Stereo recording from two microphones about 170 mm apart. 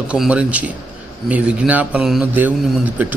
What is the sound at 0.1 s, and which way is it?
A man's voice, 5° right (ahead or behind).